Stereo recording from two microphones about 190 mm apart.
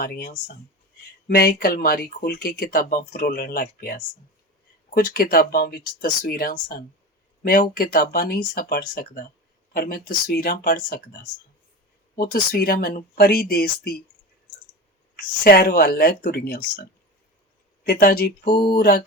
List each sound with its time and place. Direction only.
0.0 s speech: 50° left (ahead or behind)
15.1 s speech: 50° left (ahead or behind)
17.8 s speech: 55° left (ahead or behind)